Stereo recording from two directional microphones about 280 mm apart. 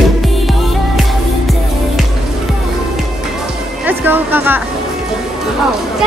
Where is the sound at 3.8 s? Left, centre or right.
Centre.